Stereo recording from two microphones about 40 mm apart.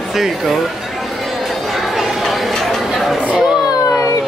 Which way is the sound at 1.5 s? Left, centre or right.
Centre.